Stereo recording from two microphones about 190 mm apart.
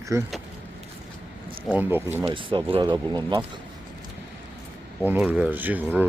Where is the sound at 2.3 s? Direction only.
25° right (ahead or behind).